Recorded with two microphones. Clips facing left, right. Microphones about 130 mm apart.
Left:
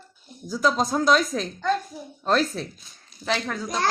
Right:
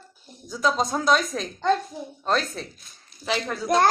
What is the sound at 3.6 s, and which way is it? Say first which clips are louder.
Speech: right 8 dB; 55° right (ahead or behind).